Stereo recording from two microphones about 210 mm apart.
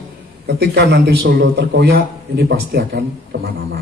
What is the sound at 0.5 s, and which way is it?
A man's voice, 50° right (ahead or behind).